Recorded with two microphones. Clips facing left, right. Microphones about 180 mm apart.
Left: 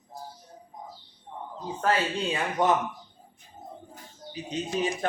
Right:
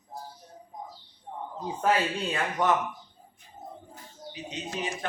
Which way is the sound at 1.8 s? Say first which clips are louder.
Even; 5° right (ahead or behind).